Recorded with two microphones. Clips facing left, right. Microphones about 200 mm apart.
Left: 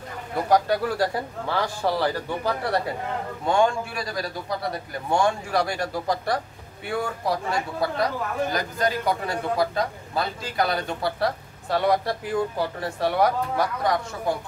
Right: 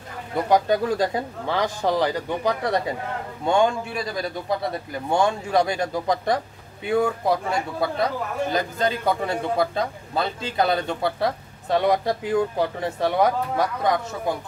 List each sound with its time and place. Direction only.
0.5 s a man's voice: 20° right (ahead or behind)